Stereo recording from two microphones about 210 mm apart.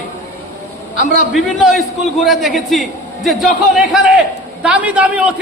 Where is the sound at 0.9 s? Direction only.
35° left (ahead or behind).